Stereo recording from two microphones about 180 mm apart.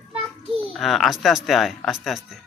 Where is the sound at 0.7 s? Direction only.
Centre (ahead or behind).